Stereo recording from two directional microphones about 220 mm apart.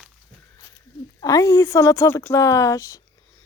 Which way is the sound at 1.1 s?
15° left (ahead or behind).